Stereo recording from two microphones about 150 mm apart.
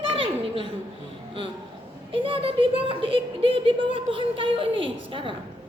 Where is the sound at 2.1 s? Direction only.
35° right (ahead or behind).